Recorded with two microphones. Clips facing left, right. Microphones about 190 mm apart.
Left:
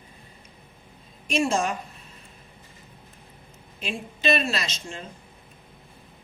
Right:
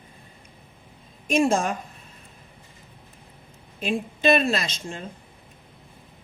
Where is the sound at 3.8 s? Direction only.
55° right (ahead or behind).